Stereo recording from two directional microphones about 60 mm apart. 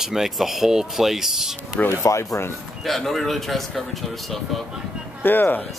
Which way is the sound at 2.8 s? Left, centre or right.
Centre.